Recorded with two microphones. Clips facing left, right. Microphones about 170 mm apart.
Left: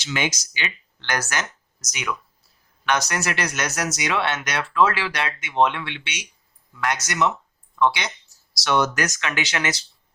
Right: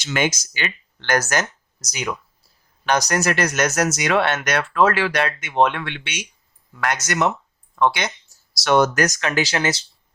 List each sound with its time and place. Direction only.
0.0 s speech: 50° right (ahead or behind); by 9.8 s 30° right (ahead or behind)